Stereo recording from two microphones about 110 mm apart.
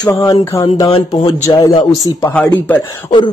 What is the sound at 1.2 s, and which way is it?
Speech, 35° left (ahead or behind).